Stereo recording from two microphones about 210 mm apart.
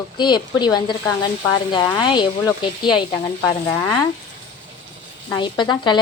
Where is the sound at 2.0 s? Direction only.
20° left (ahead or behind).